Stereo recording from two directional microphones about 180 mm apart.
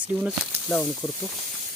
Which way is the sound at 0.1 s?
10° right (ahead or behind).